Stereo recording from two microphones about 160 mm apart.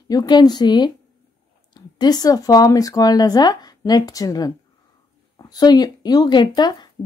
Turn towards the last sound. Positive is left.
turn(degrees=25)  # may be behind; listen again after turning